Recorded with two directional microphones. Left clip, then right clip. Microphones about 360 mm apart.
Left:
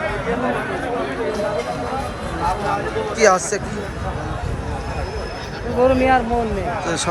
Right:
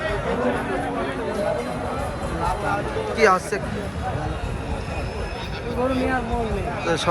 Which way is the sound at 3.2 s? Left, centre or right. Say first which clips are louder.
Left 3 dB; centre.